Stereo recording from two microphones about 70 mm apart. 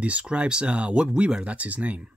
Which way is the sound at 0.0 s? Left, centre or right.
Centre.